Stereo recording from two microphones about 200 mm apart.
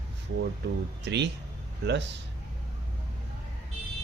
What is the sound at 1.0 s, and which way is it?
Speech, 60° right (ahead or behind).